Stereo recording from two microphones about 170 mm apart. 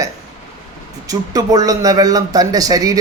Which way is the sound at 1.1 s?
20° right (ahead or behind).